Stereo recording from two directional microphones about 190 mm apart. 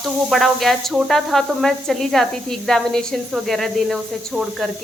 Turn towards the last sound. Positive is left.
turn(degrees=0)  # may be behind; listen again after turning